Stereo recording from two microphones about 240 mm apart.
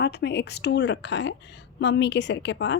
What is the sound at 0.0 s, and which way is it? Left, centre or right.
A woman's voice, left.